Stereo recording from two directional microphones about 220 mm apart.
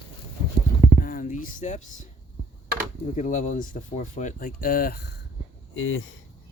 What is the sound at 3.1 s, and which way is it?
Speech, 35° left (ahead or behind).